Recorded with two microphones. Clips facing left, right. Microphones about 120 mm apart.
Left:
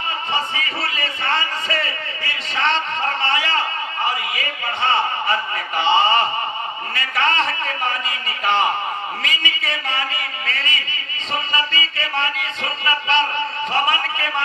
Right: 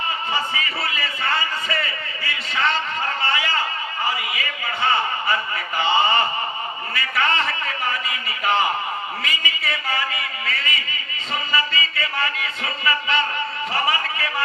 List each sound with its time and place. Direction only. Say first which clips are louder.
0.3 s a man's voice: left 1 dB; 30° left (ahead or behind)